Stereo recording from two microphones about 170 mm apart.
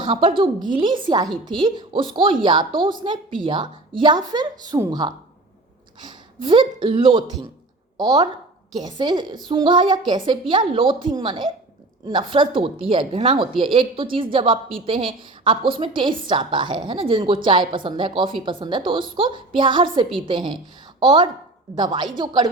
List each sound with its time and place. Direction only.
0.0 s a woman's voice: 30° right (ahead or behind)